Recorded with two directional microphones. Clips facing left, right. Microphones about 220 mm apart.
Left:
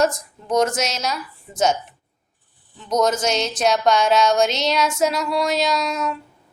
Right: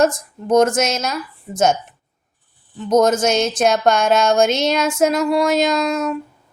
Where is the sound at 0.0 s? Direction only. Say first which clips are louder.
Right 3 dB; 50° right (ahead or behind).